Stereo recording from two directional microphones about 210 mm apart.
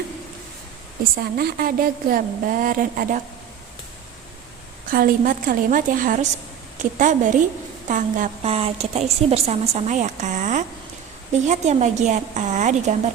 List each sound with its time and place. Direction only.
1.2 s a woman's voice: 45° right (ahead or behind)
4.9 s a woman's voice: 40° right (ahead or behind)